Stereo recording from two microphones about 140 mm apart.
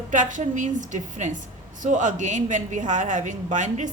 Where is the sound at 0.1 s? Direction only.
65° right (ahead or behind).